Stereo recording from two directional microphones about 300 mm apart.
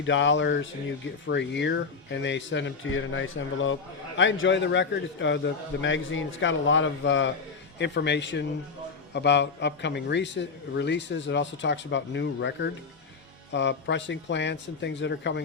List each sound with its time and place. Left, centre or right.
0.0 s speech: left